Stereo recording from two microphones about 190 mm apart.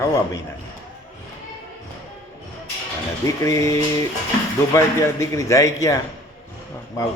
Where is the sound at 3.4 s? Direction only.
15° left (ahead or behind).